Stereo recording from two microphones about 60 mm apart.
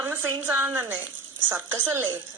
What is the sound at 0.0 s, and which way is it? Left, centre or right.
A woman's voice, right.